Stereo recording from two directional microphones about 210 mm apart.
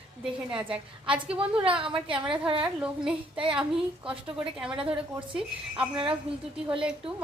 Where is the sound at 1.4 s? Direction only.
25° right (ahead or behind).